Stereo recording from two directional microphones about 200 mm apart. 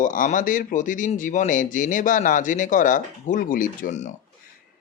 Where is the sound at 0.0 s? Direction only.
40° left (ahead or behind).